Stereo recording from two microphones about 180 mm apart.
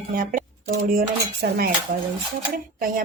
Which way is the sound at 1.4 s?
65° right (ahead or behind).